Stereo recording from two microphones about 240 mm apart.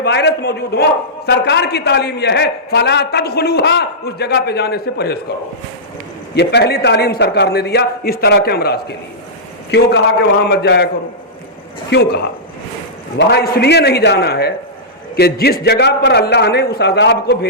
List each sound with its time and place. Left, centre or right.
0.0 s a man's voice: left
6.3 s a man's voice: left
11.9 s a man's voice: left